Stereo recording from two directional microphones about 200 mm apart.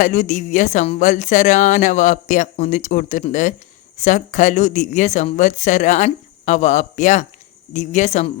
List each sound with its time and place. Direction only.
0.0 s speech: 40° left (ahead or behind)